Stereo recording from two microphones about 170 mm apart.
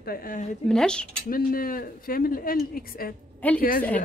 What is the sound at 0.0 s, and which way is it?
Speech, 60° left (ahead or behind).